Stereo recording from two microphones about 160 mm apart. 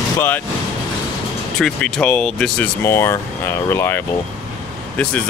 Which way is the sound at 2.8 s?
15° left (ahead or behind).